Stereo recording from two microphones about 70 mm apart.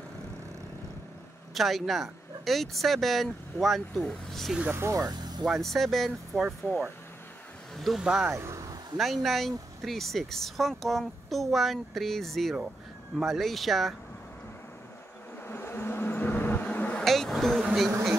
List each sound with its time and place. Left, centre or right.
1.5 s speech: centre
4.7 s speech: right
5.0 s a sound: right
5.4 s speech: centre
7.7 s speech: centre
8.3 s speech: right
8.9 s speech: centre
15.4 s a sound: left
17.0 s vehicle: centre